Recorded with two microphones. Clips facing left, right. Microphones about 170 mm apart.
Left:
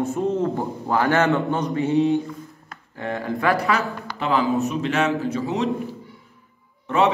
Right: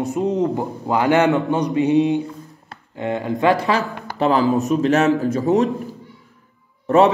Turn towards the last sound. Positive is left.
turn(degrees=-40)  # may be behind; listen again after turning